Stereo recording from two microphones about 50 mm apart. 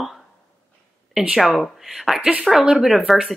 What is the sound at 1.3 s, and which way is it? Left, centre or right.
Speech, centre.